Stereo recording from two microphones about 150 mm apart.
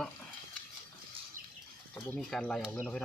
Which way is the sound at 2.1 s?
5° left (ahead or behind).